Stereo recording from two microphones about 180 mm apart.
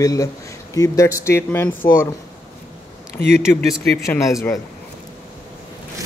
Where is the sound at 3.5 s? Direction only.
20° left (ahead or behind).